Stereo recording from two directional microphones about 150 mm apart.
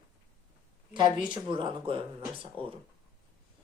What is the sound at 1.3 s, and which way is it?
A woman's voice, 35° right (ahead or behind).